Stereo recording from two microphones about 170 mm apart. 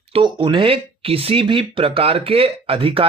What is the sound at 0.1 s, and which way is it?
Speech, 30° right (ahead or behind).